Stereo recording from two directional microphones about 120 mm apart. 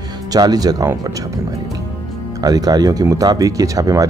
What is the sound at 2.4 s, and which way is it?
Speech, 30° right (ahead or behind).